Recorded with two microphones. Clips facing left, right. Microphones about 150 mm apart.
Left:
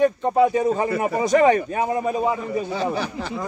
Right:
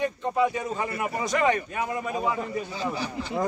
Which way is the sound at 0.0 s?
40° left (ahead or behind).